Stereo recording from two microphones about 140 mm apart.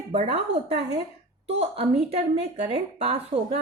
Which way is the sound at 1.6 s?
45° right (ahead or behind).